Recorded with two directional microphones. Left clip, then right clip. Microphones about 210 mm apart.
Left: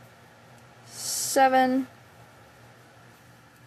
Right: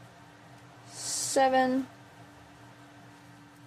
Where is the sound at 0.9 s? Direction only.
25° left (ahead or behind).